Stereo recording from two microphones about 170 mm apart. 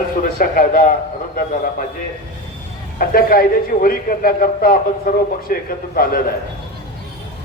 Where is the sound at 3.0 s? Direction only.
60° left (ahead or behind).